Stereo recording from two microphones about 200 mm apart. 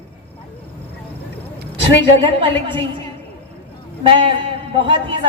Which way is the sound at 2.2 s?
25° right (ahead or behind).